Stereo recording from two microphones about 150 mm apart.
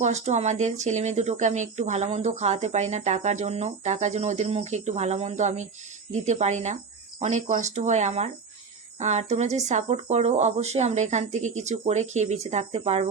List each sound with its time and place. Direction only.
0.0 s speech: 50° right (ahead or behind)